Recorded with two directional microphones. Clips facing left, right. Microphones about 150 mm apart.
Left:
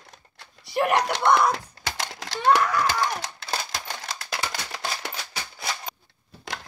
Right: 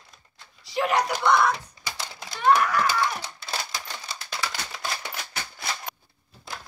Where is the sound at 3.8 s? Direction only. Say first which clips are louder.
Left 3 dB; 80° left.